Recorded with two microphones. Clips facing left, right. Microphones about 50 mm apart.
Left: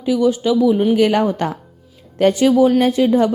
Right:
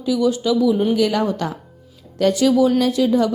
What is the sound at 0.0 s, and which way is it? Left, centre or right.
A woman's voice, left.